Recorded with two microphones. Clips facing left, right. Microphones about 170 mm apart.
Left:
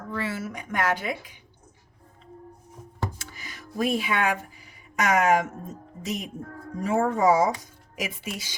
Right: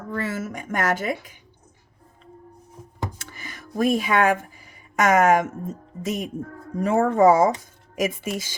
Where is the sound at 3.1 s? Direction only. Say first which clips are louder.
Right 2 dB; 55° right (ahead or behind).